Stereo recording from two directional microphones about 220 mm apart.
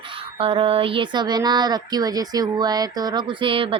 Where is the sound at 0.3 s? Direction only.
25° right (ahead or behind).